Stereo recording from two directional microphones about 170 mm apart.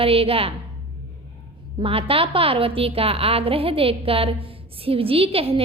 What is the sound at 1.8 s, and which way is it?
A woman's voice, 30° right (ahead or behind).